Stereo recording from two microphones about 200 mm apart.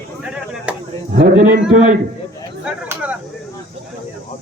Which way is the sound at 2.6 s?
5° right (ahead or behind).